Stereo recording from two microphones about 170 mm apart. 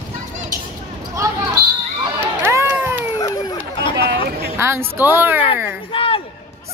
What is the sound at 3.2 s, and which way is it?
Chatter, 20° left (ahead or behind).